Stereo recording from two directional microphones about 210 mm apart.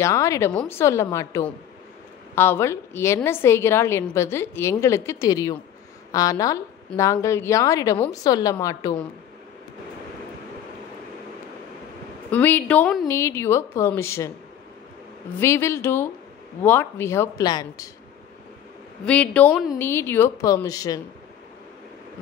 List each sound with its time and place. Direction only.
0.0 s a woman's voice: 15° left (ahead or behind)
12.3 s a woman's voice: 10° left (ahead or behind)
15.3 s a woman's voice: 10° left (ahead or behind)
19.0 s a woman's voice: 5° left (ahead or behind)